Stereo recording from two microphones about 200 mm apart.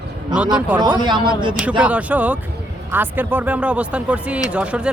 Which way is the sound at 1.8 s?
5° right (ahead or behind).